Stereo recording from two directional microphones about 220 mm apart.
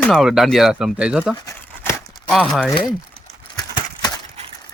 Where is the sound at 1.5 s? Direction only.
10° left (ahead or behind).